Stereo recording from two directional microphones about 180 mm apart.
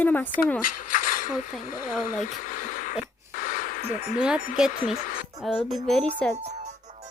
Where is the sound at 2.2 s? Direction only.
45° left (ahead or behind).